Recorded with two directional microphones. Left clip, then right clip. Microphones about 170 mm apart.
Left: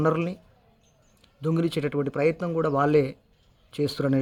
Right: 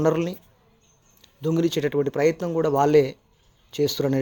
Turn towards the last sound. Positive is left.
turn(degrees=20)  # may be behind; listen again after turning